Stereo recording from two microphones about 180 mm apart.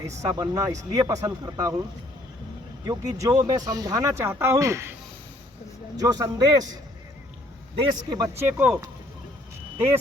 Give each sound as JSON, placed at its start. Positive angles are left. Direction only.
{"t": 0.2, "sound": "speech", "side_deg": -20}
{"t": 2.8, "sound": "speech", "side_deg": -20}
{"t": 6.0, "sound": "speech", "side_deg": -20}
{"t": 7.8, "sound": "speech", "side_deg": -20}